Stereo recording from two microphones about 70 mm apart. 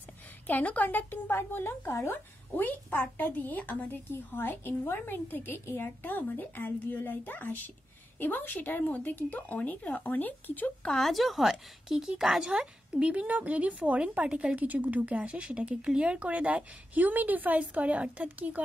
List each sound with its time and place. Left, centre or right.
0.5 s a woman's voice: left
10.9 s a woman's voice: centre; by 18.6 s right